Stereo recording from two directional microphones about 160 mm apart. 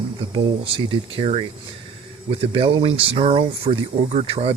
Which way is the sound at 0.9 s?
35° right (ahead or behind).